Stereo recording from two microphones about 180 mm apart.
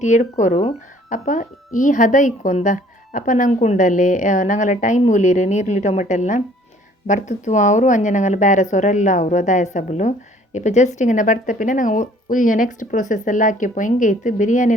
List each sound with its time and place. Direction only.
0.0 s a woman's voice: 40° left (ahead or behind)